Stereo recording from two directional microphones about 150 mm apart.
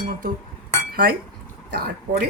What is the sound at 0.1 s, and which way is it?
Speech, 70° right (ahead or behind).